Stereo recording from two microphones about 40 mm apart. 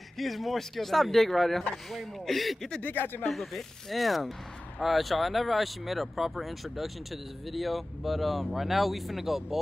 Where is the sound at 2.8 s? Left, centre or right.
Left.